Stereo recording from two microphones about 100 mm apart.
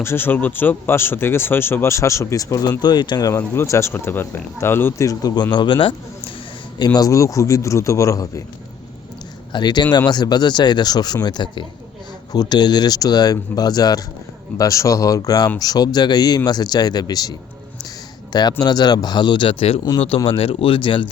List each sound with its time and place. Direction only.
0.0 s speech: 25° left (ahead or behind); by 3.3 s 45° left (ahead or behind)
3.3 s speech: 25° left (ahead or behind)
5.0 s speech: 40° left (ahead or behind); by 6.3 s 55° left (ahead or behind)
6.7 s speech: 45° left (ahead or behind)
9.5 s speech: 50° left (ahead or behind)